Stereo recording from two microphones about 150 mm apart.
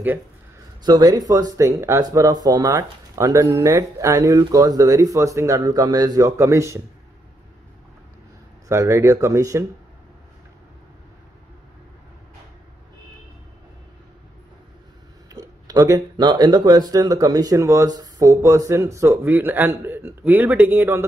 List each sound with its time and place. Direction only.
0.8 s speech: 25° right (ahead or behind)
8.6 s speech: 20° right (ahead or behind)
15.2 s speech: 25° right (ahead or behind)